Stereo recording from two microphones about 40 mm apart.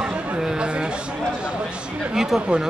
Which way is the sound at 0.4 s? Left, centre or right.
Centre.